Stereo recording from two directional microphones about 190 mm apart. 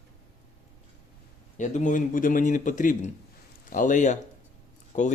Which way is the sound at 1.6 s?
40° left (ahead or behind).